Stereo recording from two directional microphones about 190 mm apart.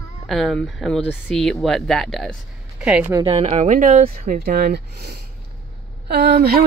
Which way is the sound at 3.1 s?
30° right (ahead or behind).